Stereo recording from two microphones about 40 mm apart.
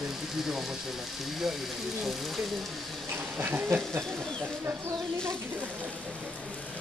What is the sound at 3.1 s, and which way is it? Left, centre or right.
Insect, right.